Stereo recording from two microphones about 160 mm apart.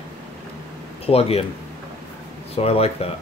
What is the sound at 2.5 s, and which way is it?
Speech, 40° left (ahead or behind).